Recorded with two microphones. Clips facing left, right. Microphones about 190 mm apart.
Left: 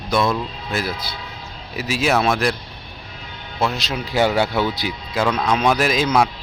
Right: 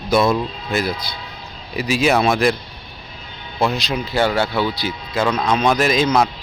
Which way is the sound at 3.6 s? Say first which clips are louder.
Right 3 dB; centre (ahead or behind).